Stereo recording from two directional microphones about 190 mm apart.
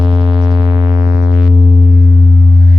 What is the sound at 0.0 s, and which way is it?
Synthesizer, 25° right (ahead or behind).